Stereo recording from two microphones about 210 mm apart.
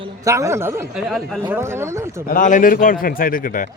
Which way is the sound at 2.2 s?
40° left (ahead or behind).